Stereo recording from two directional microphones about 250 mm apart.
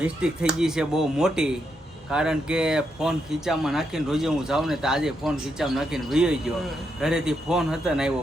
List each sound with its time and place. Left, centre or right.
0.0 s speech: centre